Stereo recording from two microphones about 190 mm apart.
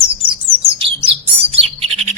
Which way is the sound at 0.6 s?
30° right (ahead or behind).